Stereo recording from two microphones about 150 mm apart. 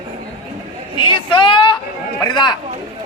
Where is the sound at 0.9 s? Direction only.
35° left (ahead or behind).